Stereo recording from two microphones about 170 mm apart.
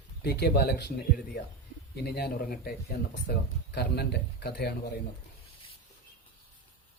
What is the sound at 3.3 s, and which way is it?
Speech, 75° left (ahead or behind).